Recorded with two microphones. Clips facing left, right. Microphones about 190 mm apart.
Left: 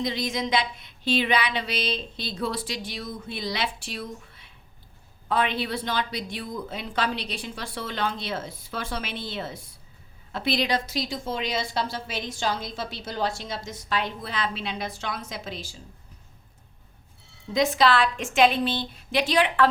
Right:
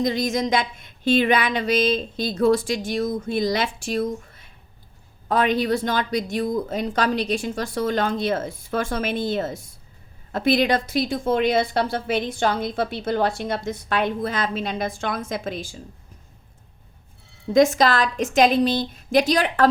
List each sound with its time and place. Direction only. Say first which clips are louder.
0.0 s a sound: right 6 dB; 45° right (ahead or behind)
10.3 s a woman's voice: right 6 dB; 50° right (ahead or behind)
17.5 s a woman's voice: right 5 dB; 45° right (ahead or behind)